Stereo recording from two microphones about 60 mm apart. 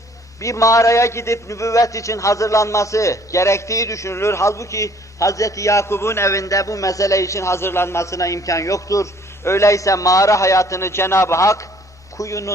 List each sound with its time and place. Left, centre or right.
0.4 s a man's voice: left
9.4 s a man's voice: left